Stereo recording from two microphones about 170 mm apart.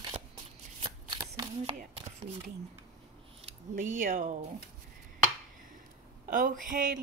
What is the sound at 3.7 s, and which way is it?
Speech, 50° right (ahead or behind).